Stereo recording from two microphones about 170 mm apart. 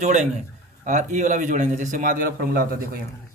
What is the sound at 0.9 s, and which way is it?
A man's voice, 45° right (ahead or behind).